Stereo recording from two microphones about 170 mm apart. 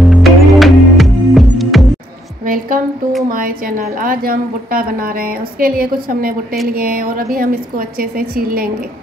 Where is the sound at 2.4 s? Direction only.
55° right (ahead or behind).